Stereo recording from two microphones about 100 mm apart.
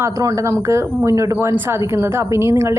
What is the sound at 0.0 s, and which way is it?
A woman's voice, 35° right (ahead or behind).